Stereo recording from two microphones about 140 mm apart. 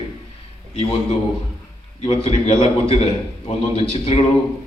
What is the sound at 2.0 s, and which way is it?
A man's voice, 45° left (ahead or behind).